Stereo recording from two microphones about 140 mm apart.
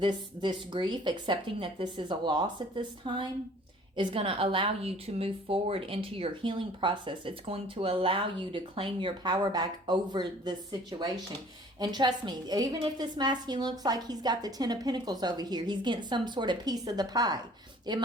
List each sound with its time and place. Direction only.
0.0 s a woman's voice: 35° right (ahead or behind)